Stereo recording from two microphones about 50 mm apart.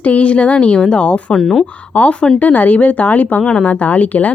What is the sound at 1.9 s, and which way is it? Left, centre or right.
A woman's voice, left.